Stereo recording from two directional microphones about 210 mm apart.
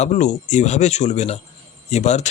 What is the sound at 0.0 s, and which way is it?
Speech, 35° left (ahead or behind).